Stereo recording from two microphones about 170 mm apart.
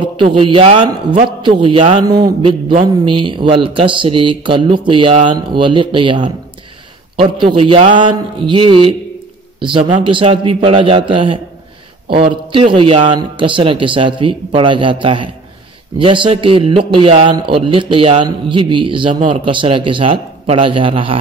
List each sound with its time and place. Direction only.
0.0 s a man's voice: 30° right (ahead or behind)
1.4 s speech: 30° right (ahead or behind)
7.5 s a man's voice: 30° right (ahead or behind)